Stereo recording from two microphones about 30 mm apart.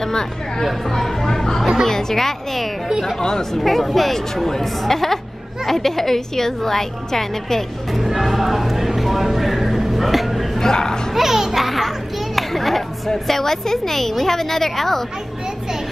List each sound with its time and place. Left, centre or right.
0.0 s a woman's voice: centre
0.8 s a woman's voice: centre
1.2 s a woman's voice: centre
3.2 s speech: centre
3.6 s a woman's voice: centre
7.9 s music: centre
10.6 s speech: centre
11.1 s music: centre
12.4 s children playing: centre
13.1 s a woman's voice: centre